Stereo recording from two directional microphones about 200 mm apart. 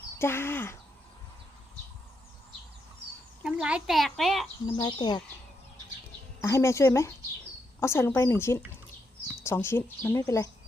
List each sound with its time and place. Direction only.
0.2 s a woman's voice: 10° left (ahead or behind)
3.4 s a woman's voice: 5° right (ahead or behind)
4.6 s speech: 20° left (ahead or behind)
6.4 s a woman's voice: 15° left (ahead or behind)